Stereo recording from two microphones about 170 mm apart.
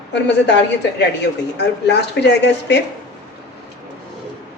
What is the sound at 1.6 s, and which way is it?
Speech, 90° left.